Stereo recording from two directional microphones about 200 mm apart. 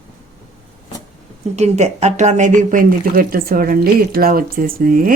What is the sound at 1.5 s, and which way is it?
Speech, 35° right (ahead or behind).